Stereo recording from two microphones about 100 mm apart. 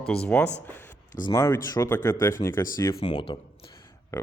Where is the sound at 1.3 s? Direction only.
35° left (ahead or behind).